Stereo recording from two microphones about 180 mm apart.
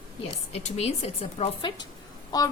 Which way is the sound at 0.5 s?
35° left (ahead or behind).